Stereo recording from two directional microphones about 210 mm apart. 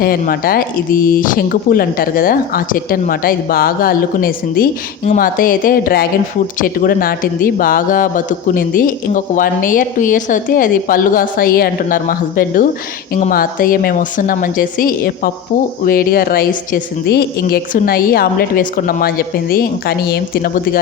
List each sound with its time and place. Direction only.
0.0 s speech: 45° left (ahead or behind)